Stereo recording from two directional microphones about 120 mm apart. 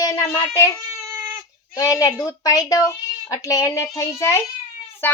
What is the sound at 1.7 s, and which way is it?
A child's voice, 25° left (ahead or behind).